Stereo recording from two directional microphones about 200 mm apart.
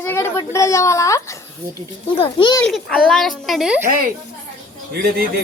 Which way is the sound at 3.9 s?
45° right (ahead or behind).